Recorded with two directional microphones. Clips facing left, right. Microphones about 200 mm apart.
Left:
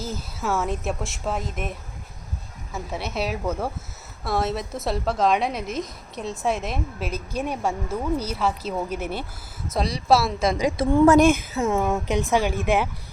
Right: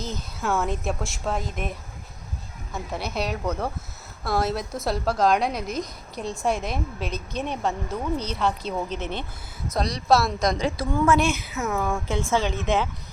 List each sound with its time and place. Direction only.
0.0 s a woman's voice: 5° left (ahead or behind)
2.7 s a woman's voice: 5° left (ahead or behind)
10.7 s a woman's voice: 25° left (ahead or behind)
11.0 s speech: 45° left (ahead or behind)
11.5 s speech: 30° left (ahead or behind); by 12.9 s 10° left (ahead or behind)